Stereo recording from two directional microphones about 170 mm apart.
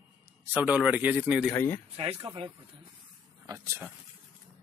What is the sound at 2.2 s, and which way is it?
Speech, 30° right (ahead or behind).